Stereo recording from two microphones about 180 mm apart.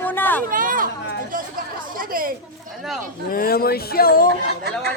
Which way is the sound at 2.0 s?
50° right (ahead or behind).